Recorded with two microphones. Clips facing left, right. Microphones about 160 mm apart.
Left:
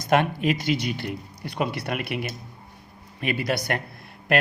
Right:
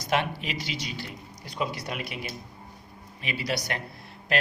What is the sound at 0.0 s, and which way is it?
A man's voice, 50° left (ahead or behind).